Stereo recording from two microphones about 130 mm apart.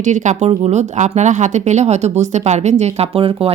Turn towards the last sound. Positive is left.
turn(degrees=-45)  # may be behind; listen again after turning